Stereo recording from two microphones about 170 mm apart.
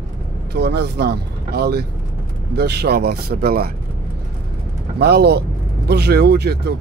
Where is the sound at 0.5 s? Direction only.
75° right (ahead or behind).